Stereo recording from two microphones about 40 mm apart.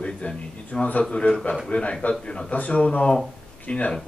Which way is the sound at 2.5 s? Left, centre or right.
Left.